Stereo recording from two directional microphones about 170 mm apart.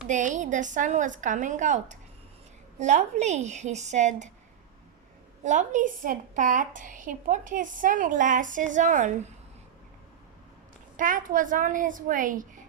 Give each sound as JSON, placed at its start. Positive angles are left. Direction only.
{"t": 0.1, "sound": "a woman's voice", "side_deg": -45}
{"t": 5.4, "sound": "a woman's voice", "side_deg": -45}
{"t": 10.9, "sound": "a woman's voice", "side_deg": -50}